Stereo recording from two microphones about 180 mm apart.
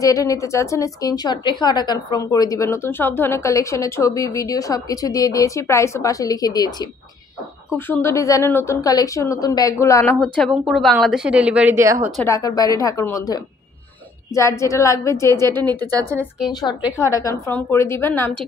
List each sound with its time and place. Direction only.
0.0 s a woman's voice: 20° left (ahead or behind)
10.3 s a woman's voice: centre (ahead or behind); by 12.0 s 15° right (ahead or behind)
12.3 s a woman's voice: 20° left (ahead or behind)
15.8 s speech: 20° right (ahead or behind)
16.6 s a woman's voice: 20° left (ahead or behind)